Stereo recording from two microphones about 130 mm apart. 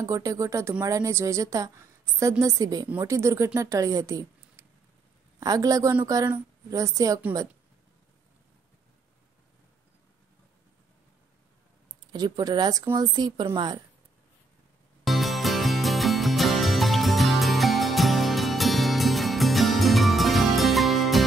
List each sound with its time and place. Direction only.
0.0 s a woman's voice: 25° right (ahead or behind)
12.1 s speech: 30° right (ahead or behind)
15.0 s music: centre (ahead or behind)